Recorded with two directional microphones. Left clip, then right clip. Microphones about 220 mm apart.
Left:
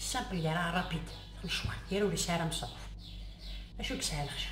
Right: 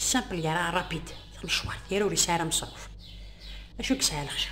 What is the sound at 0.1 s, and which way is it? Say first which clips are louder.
Speech: right 5 dB; 50° right (ahead or behind).